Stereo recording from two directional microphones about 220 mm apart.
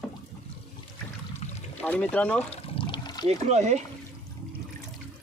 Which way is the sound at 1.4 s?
30° left (ahead or behind).